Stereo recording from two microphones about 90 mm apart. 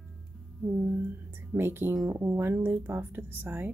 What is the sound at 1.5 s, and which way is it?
Speech, 25° right (ahead or behind).